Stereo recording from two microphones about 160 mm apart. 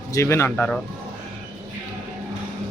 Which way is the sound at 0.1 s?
15° left (ahead or behind).